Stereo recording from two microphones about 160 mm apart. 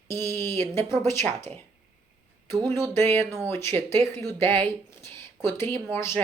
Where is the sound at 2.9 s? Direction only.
15° left (ahead or behind).